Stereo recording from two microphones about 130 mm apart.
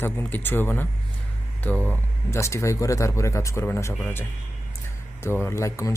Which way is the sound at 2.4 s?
20° left (ahead or behind).